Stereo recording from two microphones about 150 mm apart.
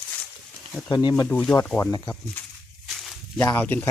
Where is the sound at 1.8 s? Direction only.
20° left (ahead or behind).